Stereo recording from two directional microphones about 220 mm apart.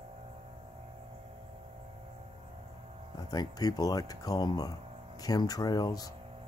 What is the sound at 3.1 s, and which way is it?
Speech, 15° left (ahead or behind).